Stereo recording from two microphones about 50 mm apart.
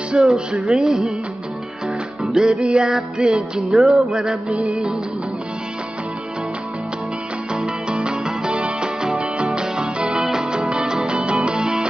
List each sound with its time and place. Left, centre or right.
0.1 s music: centre
2.2 s music: centre
3.7 s music: centre
4.6 s music: right
7.5 s music: centre